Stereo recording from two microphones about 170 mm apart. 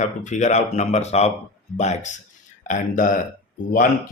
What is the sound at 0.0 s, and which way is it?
Speech, 45° left (ahead or behind).